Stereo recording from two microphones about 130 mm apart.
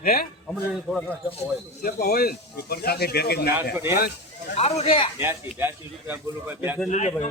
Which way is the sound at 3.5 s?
15° right (ahead or behind).